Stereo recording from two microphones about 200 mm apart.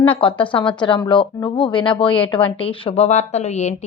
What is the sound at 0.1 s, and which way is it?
A woman's voice, 25° left (ahead or behind).